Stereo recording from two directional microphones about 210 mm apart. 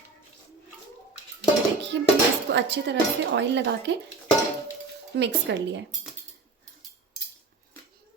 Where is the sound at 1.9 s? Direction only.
55° right (ahead or behind).